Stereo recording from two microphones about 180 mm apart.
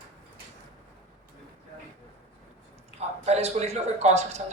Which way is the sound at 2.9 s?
35° right (ahead or behind).